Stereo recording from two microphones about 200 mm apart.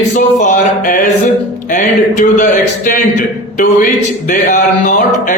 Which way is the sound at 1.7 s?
40° left (ahead or behind).